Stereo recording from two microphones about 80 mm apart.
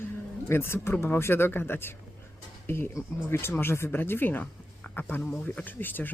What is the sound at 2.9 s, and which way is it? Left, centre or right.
Speech, left.